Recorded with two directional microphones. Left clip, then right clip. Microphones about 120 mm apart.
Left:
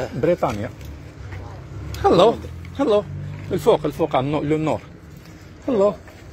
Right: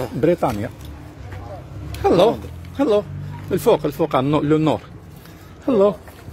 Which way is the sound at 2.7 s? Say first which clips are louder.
Right 1 dB; 30° right (ahead or behind).